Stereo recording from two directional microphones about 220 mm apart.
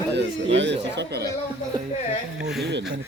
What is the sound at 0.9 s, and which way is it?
Speech, 50° right (ahead or behind).